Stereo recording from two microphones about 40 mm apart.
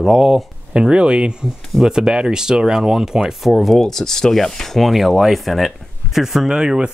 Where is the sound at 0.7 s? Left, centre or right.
Right.